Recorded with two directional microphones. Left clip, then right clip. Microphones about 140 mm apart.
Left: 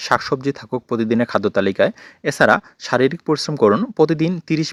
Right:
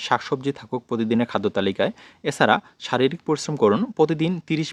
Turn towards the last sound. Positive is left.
turn(degrees=30)  # may be behind; listen again after turning